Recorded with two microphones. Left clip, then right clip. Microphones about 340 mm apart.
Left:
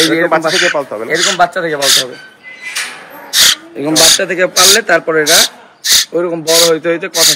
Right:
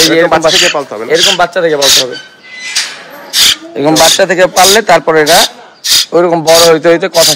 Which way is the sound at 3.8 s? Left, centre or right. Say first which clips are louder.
Right 5 dB; right.